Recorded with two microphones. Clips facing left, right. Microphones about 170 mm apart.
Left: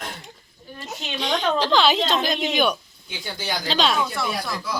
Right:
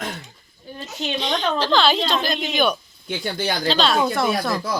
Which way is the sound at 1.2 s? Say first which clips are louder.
Left 1 dB; 10° left (ahead or behind).